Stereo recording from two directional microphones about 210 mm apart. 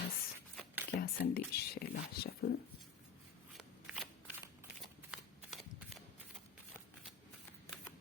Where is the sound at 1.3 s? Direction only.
45° left (ahead or behind).